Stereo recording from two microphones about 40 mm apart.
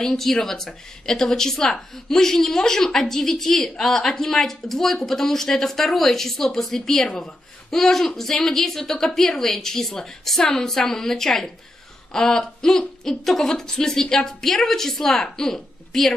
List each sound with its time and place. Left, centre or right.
0.0 s speech: centre